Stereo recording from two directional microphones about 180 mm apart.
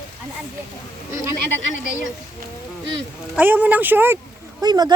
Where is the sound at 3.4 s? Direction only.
10° right (ahead or behind).